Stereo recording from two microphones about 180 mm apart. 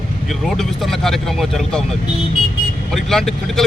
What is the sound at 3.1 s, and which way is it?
Speech, centre (ahead or behind).